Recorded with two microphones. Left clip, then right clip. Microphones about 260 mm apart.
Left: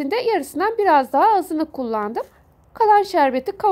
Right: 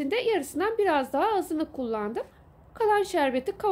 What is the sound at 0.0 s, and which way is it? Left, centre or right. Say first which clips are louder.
Speech: left 6 dB; left.